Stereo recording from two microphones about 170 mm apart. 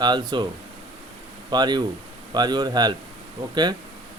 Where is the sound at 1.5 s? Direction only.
25° right (ahead or behind).